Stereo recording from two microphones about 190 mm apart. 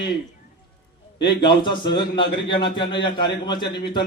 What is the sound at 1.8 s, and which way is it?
A man's voice, 25° left (ahead or behind).